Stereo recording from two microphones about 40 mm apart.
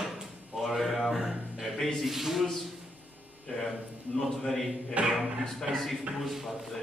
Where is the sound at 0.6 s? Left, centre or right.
Centre.